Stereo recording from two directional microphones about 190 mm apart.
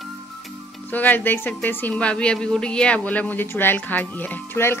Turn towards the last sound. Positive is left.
turn(degrees=10)  # may be behind; listen again after turning